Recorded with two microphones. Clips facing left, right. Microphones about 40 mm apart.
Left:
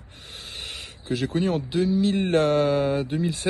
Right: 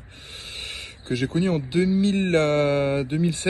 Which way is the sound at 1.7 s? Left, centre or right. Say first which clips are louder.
Right 1 dB; right.